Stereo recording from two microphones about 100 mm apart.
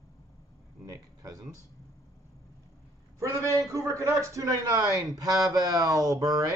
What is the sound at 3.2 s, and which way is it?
A man's voice, 30° right (ahead or behind).